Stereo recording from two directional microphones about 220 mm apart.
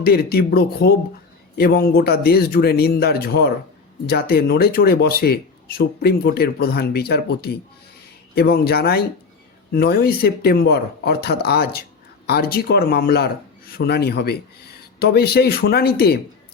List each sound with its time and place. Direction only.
0.0 s speech: 45° left (ahead or behind)